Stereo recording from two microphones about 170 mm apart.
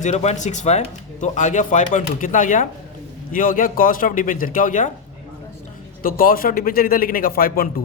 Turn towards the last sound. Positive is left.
turn(degrees=60)  # may be behind; listen again after turning